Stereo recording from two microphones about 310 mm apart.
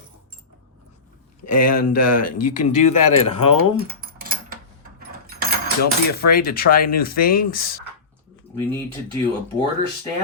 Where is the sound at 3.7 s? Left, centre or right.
Right.